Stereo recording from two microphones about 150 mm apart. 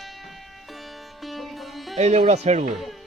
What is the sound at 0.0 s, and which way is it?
Music, centre (ahead or behind).